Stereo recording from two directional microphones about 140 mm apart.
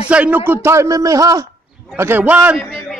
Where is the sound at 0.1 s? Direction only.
10° right (ahead or behind).